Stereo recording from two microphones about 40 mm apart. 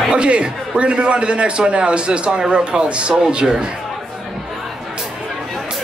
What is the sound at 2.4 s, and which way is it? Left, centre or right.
Speech, centre.